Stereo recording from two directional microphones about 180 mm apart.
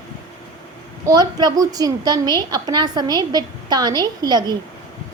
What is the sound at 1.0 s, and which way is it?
A woman's voice, 20° right (ahead or behind).